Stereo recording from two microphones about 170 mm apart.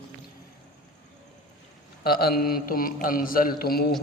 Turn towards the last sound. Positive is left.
turn(degrees=65)  # may be behind; listen again after turning